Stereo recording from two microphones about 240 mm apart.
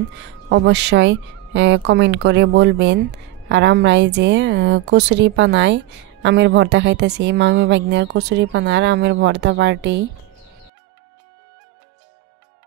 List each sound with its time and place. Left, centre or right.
0.1 s a woman's voice: right